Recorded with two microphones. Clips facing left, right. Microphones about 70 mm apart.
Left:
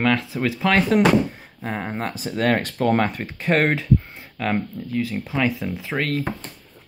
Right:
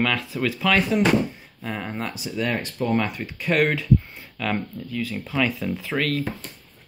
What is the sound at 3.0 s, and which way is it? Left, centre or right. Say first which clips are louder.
Speech: left 3 dB; left.